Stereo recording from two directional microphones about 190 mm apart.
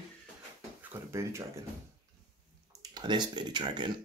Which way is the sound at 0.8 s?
10° right (ahead or behind).